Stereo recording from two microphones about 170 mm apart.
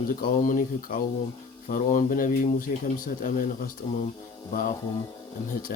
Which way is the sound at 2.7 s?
40° left (ahead or behind).